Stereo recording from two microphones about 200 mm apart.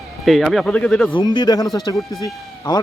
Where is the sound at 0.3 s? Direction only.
Centre (ahead or behind).